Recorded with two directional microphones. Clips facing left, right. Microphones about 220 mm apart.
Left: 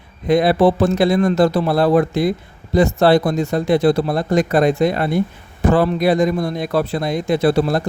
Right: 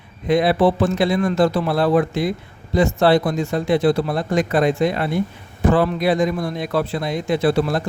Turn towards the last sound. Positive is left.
turn(degrees=40)  # may be behind; listen again after turning